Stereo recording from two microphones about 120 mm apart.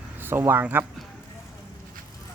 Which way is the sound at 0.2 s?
20° right (ahead or behind).